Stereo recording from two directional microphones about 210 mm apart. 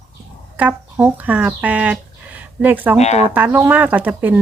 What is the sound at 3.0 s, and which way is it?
Speech, 30° left (ahead or behind).